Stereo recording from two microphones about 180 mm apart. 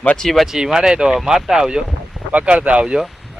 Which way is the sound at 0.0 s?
5° left (ahead or behind).